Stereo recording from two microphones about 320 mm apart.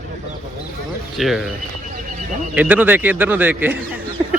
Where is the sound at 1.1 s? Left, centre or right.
Centre.